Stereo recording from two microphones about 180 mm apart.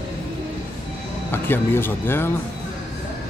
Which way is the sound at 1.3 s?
15° left (ahead or behind).